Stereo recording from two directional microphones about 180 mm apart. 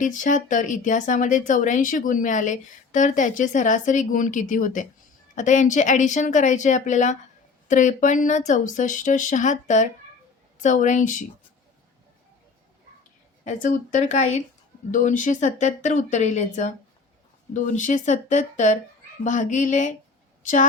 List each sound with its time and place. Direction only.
0.0 s speech: 45° left (ahead or behind)
13.4 s speech: 45° left (ahead or behind)